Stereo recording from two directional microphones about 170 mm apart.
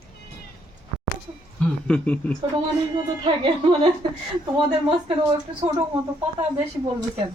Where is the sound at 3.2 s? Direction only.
30° right (ahead or behind).